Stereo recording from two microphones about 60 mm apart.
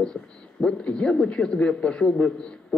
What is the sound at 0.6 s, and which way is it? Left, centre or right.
A man's voice, centre.